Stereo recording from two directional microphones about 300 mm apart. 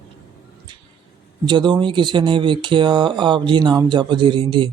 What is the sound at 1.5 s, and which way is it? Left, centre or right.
Speech, centre.